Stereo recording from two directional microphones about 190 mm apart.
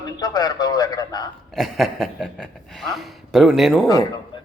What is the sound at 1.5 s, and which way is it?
A man's voice, centre (ahead or behind).